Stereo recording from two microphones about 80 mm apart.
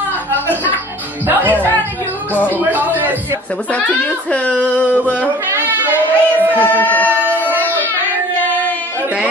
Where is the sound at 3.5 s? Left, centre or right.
Centre.